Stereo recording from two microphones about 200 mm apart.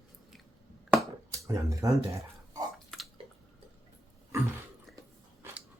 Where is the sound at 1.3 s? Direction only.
15° right (ahead or behind).